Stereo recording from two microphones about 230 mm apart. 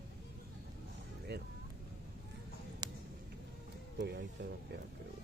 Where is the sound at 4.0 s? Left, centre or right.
Right.